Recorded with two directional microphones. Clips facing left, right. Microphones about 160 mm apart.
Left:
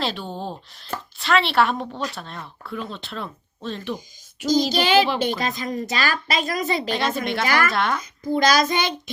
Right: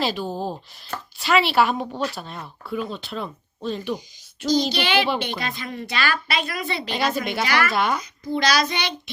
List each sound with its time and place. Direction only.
0.0 s speech: 5° right (ahead or behind)
4.7 s a child's voice: 45° left (ahead or behind)
6.9 s speech: centre (ahead or behind)
7.4 s a child's voice: 45° left (ahead or behind)
7.7 s speech: centre (ahead or behind)
8.2 s a child's voice: 45° left (ahead or behind)